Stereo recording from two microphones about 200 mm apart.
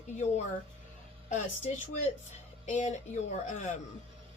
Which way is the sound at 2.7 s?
35° left (ahead or behind).